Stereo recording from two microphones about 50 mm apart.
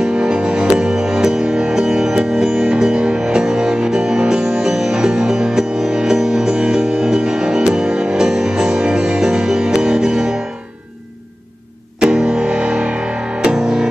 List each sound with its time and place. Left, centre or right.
0.0 s music: centre
12.0 s music: centre